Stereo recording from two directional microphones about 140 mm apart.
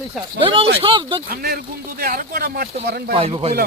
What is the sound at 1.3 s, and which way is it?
Speech, 90° right.